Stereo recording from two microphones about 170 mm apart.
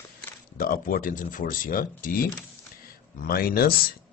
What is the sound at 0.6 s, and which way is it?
Speech, 55° left (ahead or behind).